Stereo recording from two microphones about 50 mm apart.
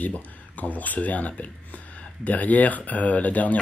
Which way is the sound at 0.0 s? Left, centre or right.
Left.